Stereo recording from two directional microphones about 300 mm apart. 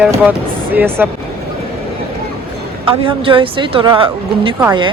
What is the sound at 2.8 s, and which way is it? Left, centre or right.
A woman's voice, centre.